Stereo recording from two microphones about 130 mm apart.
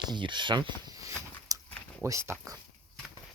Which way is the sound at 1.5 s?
30° right (ahead or behind).